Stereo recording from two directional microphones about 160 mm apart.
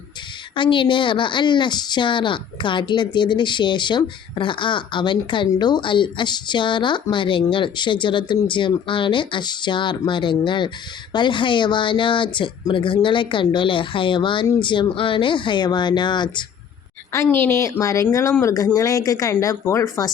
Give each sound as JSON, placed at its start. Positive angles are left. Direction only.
{"t": 0.5, "sound": "a woman's voice", "side_deg": 30}
{"t": 17.1, "sound": "speech", "side_deg": 15}